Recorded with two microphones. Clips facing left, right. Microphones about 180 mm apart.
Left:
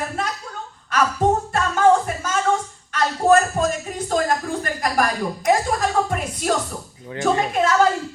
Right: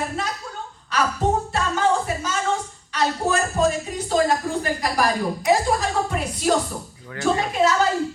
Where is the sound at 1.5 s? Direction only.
50° left (ahead or behind).